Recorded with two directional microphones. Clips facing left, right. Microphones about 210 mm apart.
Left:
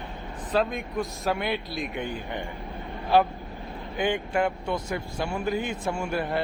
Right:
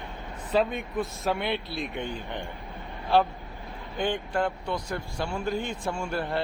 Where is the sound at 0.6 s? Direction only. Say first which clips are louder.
Even; centre (ahead or behind).